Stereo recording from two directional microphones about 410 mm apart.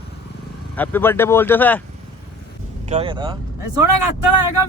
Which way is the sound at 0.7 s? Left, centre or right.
Centre.